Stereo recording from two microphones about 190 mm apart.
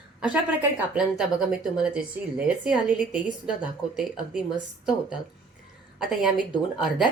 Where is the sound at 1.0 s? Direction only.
5° right (ahead or behind).